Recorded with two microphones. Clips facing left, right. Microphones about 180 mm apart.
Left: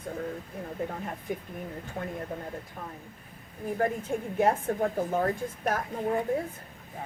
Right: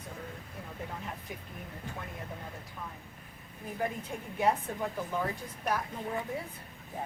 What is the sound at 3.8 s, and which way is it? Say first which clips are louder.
Speech: left 6 dB; 50° left (ahead or behind).